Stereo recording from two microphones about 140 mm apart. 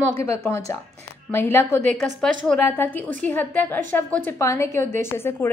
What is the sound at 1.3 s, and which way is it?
A woman's voice, 15° left (ahead or behind).